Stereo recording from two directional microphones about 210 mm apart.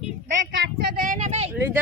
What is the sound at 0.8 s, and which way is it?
Speech, 40° right (ahead or behind).